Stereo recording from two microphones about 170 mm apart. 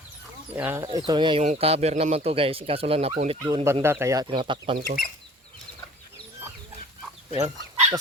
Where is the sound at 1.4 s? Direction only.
40° right (ahead or behind).